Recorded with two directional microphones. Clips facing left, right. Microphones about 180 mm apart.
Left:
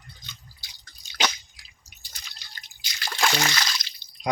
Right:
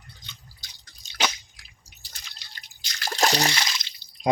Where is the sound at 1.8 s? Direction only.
35° right (ahead or behind).